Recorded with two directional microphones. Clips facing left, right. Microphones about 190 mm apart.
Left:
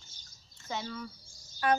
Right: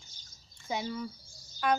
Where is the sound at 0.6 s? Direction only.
15° right (ahead or behind).